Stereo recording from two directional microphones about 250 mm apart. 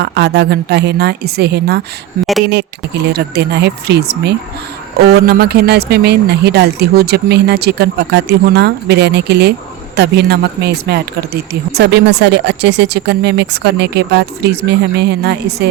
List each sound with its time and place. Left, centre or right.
0.0 s speech: right